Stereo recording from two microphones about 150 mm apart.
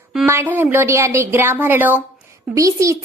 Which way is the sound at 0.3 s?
15° right (ahead or behind).